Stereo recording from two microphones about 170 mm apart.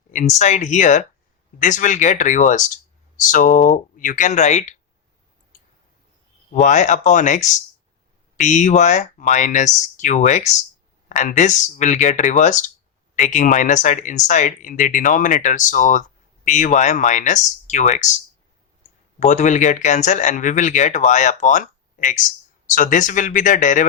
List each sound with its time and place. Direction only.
0.1 s speech: 45° left (ahead or behind)
6.6 s speech: 45° left (ahead or behind)
19.2 s speech: 45° left (ahead or behind)